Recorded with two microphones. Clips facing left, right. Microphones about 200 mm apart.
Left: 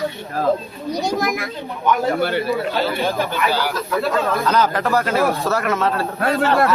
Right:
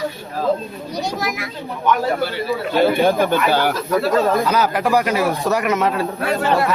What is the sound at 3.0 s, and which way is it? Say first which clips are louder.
Speech: right 5 dB; 50° right (ahead or behind).